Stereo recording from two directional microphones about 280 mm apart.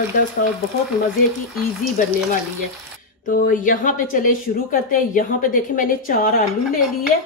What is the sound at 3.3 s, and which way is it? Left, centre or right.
Speech, left.